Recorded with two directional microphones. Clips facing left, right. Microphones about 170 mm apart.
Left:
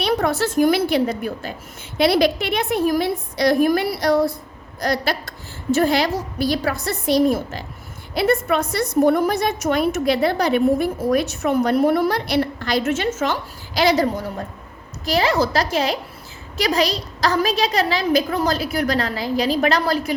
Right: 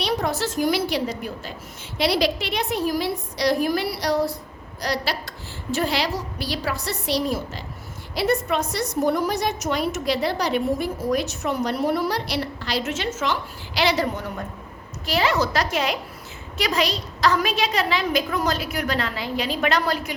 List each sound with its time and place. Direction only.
0.0 s a woman's voice: 55° left (ahead or behind); by 20.1 s 35° left (ahead or behind)